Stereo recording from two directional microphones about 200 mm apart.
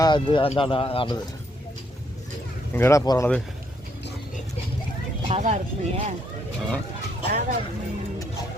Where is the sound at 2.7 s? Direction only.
15° left (ahead or behind).